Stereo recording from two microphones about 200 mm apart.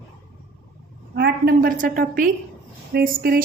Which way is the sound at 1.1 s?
50° right (ahead or behind).